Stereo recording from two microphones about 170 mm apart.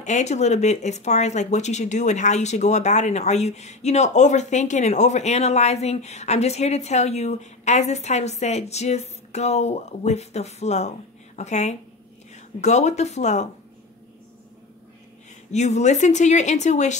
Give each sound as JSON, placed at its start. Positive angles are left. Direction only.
{"t": 0.0, "sound": "a woman's voice", "side_deg": 45}
{"t": 15.5, "sound": "a woman's voice", "side_deg": 40}